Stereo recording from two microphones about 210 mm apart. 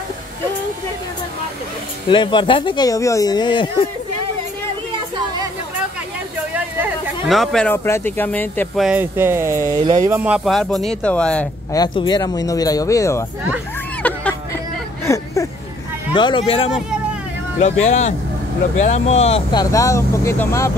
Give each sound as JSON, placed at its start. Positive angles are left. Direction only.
{"t": 2.0, "sound": "speech", "side_deg": 25}
{"t": 6.5, "sound": "speech", "side_deg": -5}
{"t": 8.8, "sound": "speech", "side_deg": -10}
{"t": 11.7, "sound": "speech", "side_deg": 20}
{"t": 14.0, "sound": "a sound", "side_deg": 5}
{"t": 15.1, "sound": "speech", "side_deg": 15}